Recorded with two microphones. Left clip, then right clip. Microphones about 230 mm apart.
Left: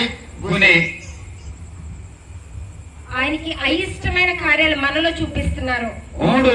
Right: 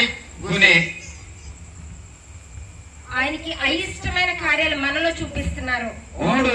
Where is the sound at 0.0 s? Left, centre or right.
Centre.